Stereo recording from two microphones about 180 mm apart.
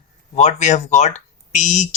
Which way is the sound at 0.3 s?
40° left (ahead or behind).